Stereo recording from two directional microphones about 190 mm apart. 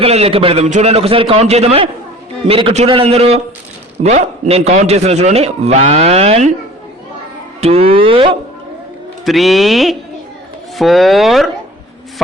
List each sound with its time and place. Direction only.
0.0 s a man's voice: 30° right (ahead or behind)
7.6 s speech: 30° right (ahead or behind)
9.2 s speech: centre (ahead or behind)